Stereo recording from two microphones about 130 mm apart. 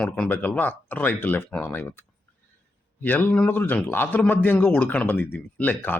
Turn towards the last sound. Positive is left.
turn(degrees=15)  # may be behind; listen again after turning